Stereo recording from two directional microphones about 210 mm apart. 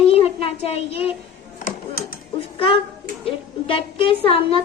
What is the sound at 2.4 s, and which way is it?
A woman's voice, 25° left (ahead or behind).